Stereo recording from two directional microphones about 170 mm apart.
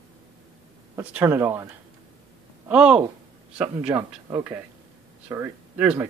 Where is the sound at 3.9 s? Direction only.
20° right (ahead or behind).